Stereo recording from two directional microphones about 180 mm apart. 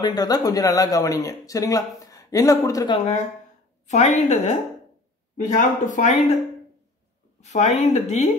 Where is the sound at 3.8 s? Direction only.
40° left (ahead or behind).